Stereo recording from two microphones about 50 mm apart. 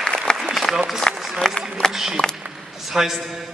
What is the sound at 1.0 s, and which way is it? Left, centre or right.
Run, centre.